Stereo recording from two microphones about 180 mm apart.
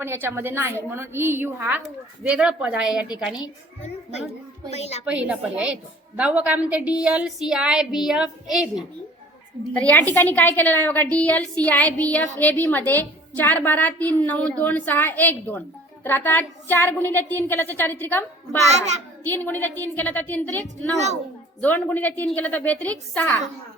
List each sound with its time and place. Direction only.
0.0 s a woman's voice: 10° right (ahead or behind)
4.7 s a woman's voice: 35° left (ahead or behind)
5.0 s a woman's voice: 10° right (ahead or behind)
9.7 s a woman's voice: 10° left (ahead or behind)
21.6 s a woman's voice: 10° left (ahead or behind)